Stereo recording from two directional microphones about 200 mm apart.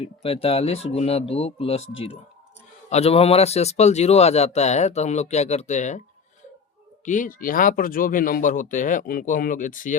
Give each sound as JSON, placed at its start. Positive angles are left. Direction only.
{"t": 0.0, "sound": "speech", "side_deg": 30}
{"t": 7.0, "sound": "speech", "side_deg": 40}